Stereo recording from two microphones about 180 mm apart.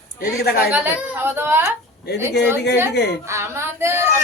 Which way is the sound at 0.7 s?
10° right (ahead or behind).